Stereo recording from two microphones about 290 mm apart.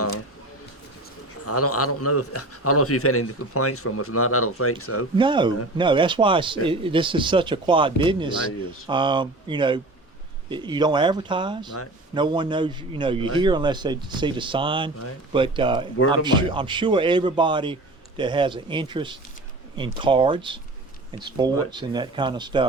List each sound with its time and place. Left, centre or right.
1.5 s a man's voice: left
5.1 s a man's voice: centre